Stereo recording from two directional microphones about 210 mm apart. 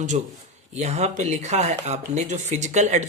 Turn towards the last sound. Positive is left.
turn(degrees=-35)  # may be behind; listen again after turning